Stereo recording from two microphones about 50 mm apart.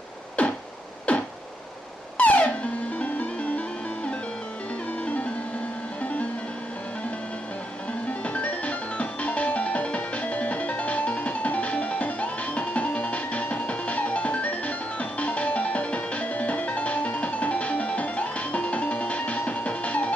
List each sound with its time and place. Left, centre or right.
0.4 s a sound: left
2.1 s music: left
8.1 s music: left